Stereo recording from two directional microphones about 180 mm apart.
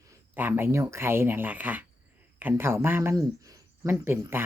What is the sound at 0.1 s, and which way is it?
Speech, 10° right (ahead or behind).